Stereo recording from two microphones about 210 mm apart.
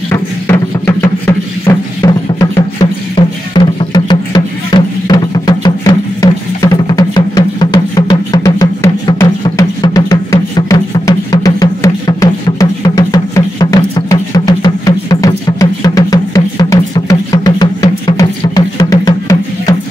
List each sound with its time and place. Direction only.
0.1 s music: 10° left (ahead or behind)